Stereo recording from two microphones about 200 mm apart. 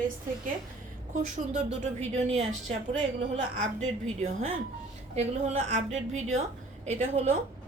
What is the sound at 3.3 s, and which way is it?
Speech, 35° right (ahead or behind).